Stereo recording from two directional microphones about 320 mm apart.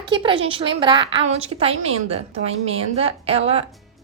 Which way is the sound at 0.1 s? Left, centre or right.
Centre.